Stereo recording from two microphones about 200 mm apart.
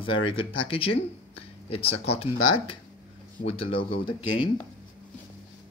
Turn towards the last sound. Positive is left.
turn(degrees=25)  # may be behind; listen again after turning